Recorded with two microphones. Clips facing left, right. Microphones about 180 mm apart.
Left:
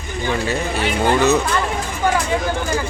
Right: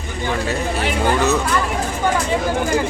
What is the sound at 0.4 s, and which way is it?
Speech, centre (ahead or behind).